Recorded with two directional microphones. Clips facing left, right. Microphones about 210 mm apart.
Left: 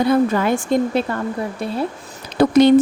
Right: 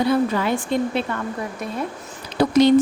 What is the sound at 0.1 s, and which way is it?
Speech, 50° left (ahead or behind).